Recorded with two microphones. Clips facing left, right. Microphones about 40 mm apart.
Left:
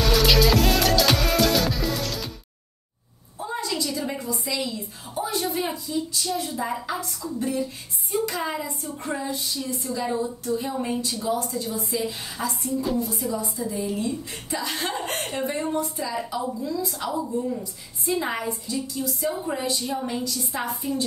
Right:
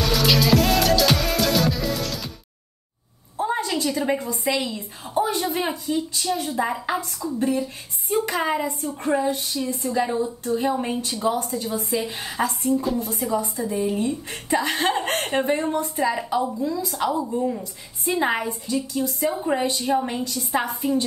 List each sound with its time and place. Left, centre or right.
0.0 s music: centre
3.3 s a woman's voice: right
10.4 s a woman's voice: right
20.2 s a woman's voice: right
20.5 s a woman's voice: right